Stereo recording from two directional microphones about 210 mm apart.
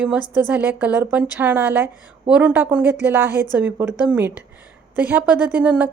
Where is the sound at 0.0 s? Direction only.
5° right (ahead or behind).